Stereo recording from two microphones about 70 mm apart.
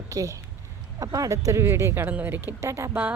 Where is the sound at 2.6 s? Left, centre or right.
Right.